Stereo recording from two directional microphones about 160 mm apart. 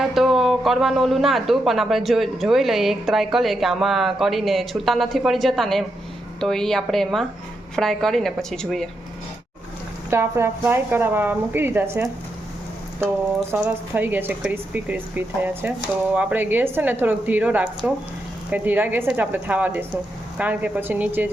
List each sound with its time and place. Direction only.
0.0 s a man's voice: centre (ahead or behind)
10.1 s a woman's voice: 15° right (ahead or behind)
13.6 s a woman's voice: 10° right (ahead or behind)